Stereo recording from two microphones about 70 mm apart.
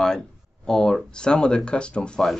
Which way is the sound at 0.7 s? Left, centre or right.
Centre.